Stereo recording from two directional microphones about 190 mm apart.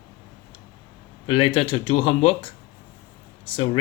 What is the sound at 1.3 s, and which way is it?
Speech, 30° left (ahead or behind).